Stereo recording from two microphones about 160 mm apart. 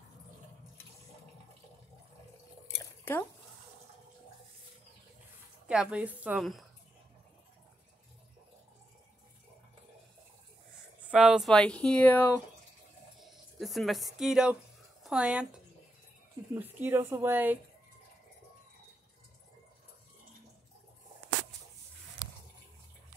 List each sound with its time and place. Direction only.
2.8 s squish: 15° left (ahead or behind)
5.7 s speech: 5° right (ahead or behind)
11.1 s speech: 5° right (ahead or behind); by 12.4 s 10° left (ahead or behind)
13.2 s speech: centre (ahead or behind)